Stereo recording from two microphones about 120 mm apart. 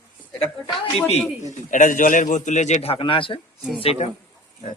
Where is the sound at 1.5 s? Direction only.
90° left; by 4.0 s 55° left (ahead or behind).